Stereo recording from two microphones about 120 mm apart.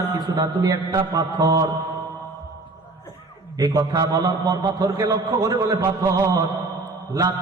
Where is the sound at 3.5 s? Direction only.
30° right (ahead or behind).